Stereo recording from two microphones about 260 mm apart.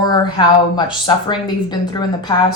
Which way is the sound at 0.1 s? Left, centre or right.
Centre.